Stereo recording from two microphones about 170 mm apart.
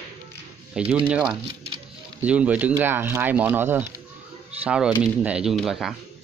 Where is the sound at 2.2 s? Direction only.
10° right (ahead or behind).